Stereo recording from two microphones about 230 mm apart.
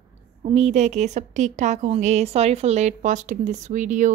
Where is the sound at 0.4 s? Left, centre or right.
Right.